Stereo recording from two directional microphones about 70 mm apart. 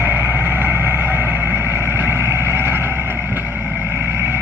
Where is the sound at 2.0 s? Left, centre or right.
Right.